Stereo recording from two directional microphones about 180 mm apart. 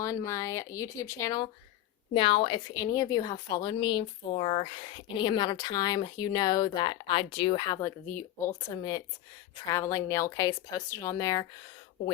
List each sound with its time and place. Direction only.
0.0 s a woman's voice: 15° left (ahead or behind)